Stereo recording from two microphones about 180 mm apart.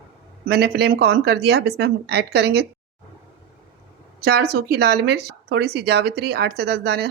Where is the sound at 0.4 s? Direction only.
65° right (ahead or behind).